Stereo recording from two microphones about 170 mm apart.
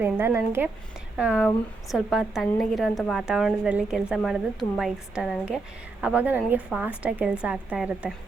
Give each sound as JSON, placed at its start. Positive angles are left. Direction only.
{"t": 0.0, "sound": "a woman's voice", "side_deg": -15}